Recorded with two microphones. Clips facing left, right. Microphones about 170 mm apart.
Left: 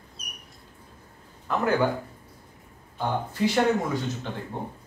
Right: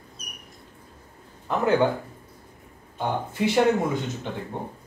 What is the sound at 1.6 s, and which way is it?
Speech, 25° right (ahead or behind).